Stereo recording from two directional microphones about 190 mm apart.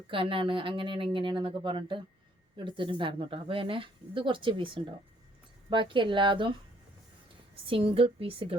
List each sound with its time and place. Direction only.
0.1 s speech: 25° right (ahead or behind)
7.7 s speech: 30° right (ahead or behind)